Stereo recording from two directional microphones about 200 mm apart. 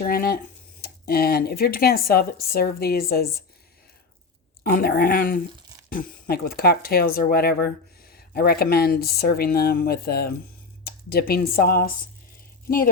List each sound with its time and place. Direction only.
0.0 s speech: 50° left (ahead or behind)
4.6 s speech: 50° left (ahead or behind)